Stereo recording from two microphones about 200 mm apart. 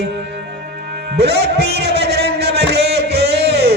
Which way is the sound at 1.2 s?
55° right (ahead or behind).